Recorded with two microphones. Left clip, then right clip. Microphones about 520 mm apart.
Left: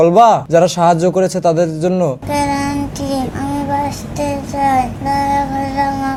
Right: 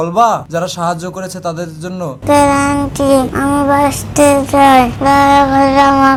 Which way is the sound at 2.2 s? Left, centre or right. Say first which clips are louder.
Right 7 dB; right.